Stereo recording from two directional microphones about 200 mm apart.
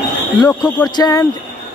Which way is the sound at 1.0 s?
15° left (ahead or behind).